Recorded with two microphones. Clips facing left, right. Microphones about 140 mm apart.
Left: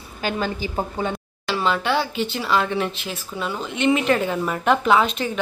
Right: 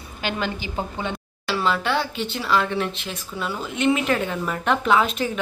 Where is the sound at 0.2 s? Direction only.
40° left (ahead or behind).